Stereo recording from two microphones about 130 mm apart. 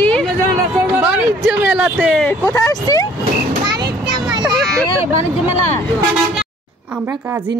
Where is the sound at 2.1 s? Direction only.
10° left (ahead or behind).